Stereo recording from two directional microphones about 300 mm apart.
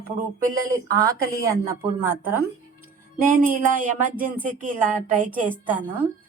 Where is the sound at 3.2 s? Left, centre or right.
Right.